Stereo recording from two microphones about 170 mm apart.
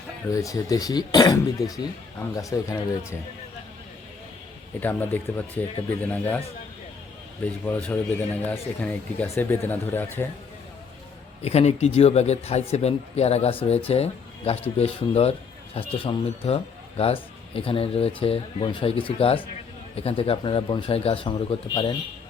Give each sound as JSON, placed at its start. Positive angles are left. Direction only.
{"t": 0.3, "sound": "speech", "side_deg": 20}
{"t": 4.8, "sound": "speech", "side_deg": 10}
{"t": 7.4, "sound": "speech", "side_deg": 5}
{"t": 11.4, "sound": "speech", "side_deg": 40}